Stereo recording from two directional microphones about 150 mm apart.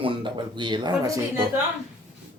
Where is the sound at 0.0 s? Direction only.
35° right (ahead or behind).